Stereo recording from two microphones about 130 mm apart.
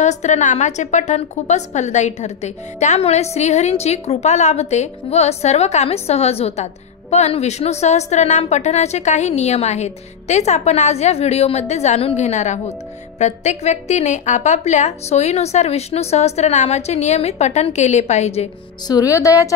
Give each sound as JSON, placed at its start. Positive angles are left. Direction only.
{"t": 0.0, "sound": "a woman's voice", "side_deg": 65}
{"t": 18.9, "sound": "a woman's voice", "side_deg": 25}